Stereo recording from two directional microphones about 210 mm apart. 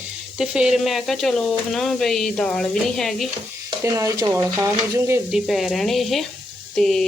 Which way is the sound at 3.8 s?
15° right (ahead or behind).